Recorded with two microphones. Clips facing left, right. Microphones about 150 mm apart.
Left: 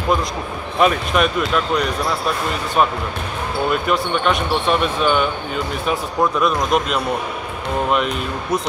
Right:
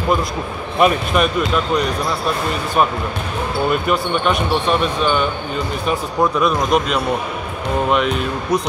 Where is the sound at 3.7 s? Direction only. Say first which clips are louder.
Even; centre (ahead or behind).